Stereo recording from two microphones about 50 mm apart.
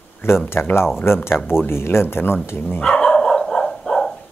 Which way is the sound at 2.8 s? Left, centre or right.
Centre.